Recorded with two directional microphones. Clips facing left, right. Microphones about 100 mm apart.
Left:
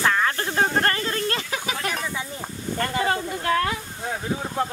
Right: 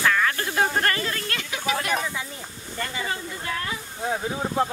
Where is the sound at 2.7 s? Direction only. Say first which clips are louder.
Left 6 dB; 55° left (ahead or behind).